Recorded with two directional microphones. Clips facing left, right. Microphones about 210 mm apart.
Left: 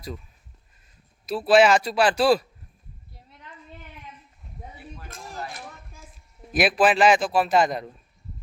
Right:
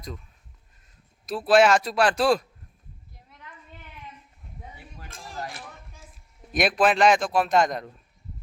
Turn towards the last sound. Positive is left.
turn(degrees=5)  # may be behind; listen again after turning